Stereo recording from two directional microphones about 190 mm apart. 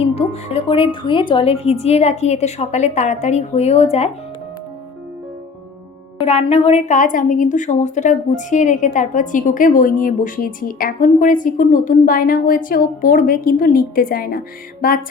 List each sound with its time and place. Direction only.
0.0 s speech: 30° left (ahead or behind)
6.2 s a woman's voice: 30° left (ahead or behind); by 15.0 s 50° left (ahead or behind)